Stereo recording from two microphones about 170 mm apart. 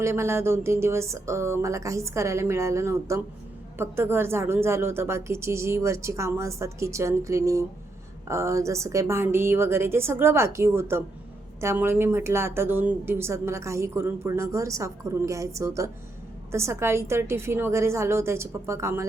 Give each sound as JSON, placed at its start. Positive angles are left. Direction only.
{"t": 0.0, "sound": "speech", "side_deg": -15}